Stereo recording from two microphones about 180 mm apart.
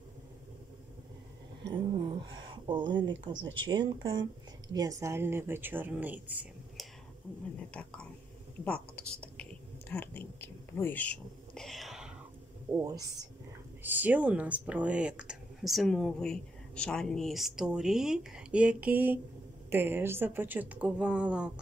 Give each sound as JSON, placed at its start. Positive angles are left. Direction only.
{"t": 1.7, "sound": "a sound", "side_deg": -25}
{"t": 3.6, "sound": "speech", "side_deg": -25}
{"t": 7.7, "sound": "speech", "side_deg": 5}
{"t": 8.6, "sound": "whispering", "side_deg": 5}
{"t": 12.7, "sound": "speech", "side_deg": -20}